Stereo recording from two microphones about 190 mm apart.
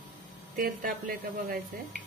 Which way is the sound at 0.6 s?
50° right (ahead or behind).